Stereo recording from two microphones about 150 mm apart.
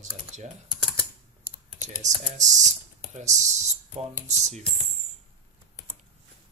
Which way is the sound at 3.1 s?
50° right (ahead or behind).